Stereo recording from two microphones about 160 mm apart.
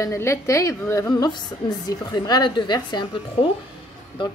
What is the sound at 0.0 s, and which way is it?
A woman's voice, 20° left (ahead or behind).